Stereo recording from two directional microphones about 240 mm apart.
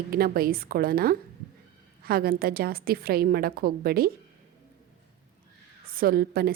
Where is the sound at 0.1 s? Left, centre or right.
Right.